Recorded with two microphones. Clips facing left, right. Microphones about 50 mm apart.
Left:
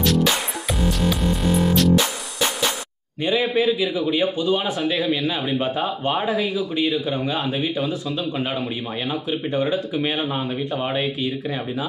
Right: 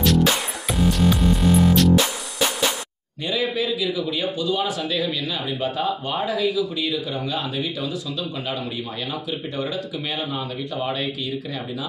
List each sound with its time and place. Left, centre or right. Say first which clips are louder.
0.0 s music: right 1 dB; centre
3.2 s a man's voice: left 4 dB; left